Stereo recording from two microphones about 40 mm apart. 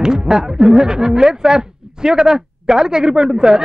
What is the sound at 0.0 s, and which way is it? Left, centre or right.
Speech, centre.